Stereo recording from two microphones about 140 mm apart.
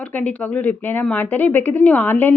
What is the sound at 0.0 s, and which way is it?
Speech, 10° left (ahead or behind).